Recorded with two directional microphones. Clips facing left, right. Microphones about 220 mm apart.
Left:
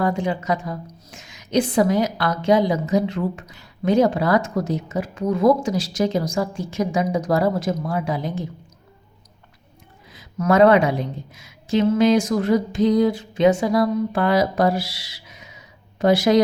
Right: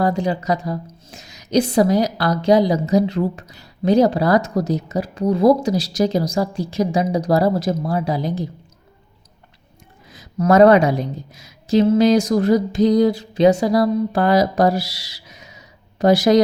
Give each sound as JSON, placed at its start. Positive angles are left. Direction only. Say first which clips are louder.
{"t": 0.0, "sound": "a woman's voice", "louder": "right 3 dB", "side_deg": -40}
{"t": 10.1, "sound": "a woman's voice", "louder": "right 3 dB", "side_deg": -40}